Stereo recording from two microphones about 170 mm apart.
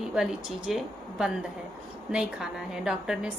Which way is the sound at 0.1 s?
Centre (ahead or behind).